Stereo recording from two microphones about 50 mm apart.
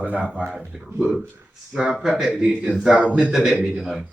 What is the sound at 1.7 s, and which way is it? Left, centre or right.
Speech, centre.